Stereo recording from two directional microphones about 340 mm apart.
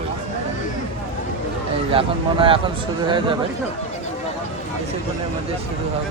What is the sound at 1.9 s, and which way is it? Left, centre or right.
Speech, centre.